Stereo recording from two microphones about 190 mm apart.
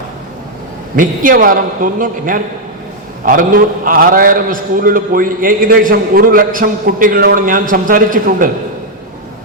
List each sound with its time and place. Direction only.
0.9 s a man's voice: 45° right (ahead or behind)